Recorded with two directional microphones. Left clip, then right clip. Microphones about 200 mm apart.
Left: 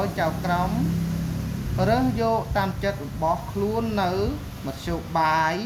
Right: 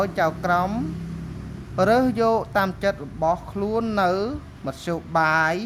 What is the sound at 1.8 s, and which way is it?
Speech, 45° right (ahead or behind).